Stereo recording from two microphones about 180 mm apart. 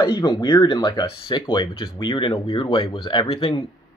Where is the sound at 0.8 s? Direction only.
25° left (ahead or behind).